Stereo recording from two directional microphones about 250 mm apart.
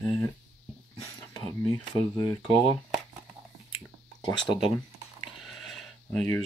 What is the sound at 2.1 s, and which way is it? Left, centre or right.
Speech, centre.